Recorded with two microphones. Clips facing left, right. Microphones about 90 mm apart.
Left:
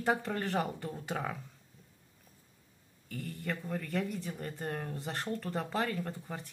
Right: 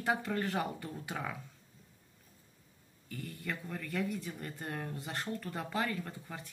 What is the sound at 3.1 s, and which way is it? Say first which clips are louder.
Speech: left 3 dB; 45° left (ahead or behind).